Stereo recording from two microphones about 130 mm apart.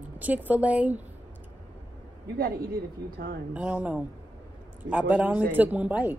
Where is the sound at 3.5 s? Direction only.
10° right (ahead or behind).